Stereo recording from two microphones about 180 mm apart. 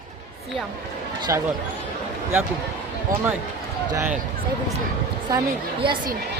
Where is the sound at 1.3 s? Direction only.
15° right (ahead or behind).